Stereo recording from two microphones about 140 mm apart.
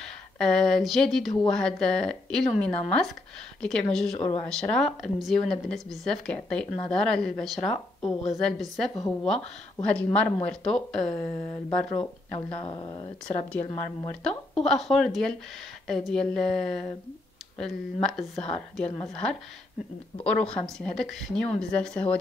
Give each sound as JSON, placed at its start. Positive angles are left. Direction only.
{"t": 0.0, "sound": "a sound", "side_deg": 5}
{"t": 1.5, "sound": "speech", "side_deg": 5}
{"t": 12.4, "sound": "speech", "side_deg": 35}
{"t": 14.2, "sound": "speech", "side_deg": 5}